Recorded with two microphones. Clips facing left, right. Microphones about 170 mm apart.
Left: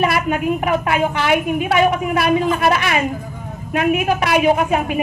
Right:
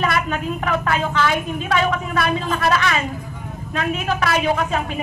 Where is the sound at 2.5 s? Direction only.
20° left (ahead or behind).